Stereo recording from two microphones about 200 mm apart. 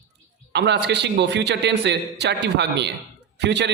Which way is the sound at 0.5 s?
60° right (ahead or behind).